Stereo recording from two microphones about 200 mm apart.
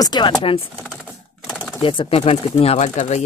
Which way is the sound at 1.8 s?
25° left (ahead or behind).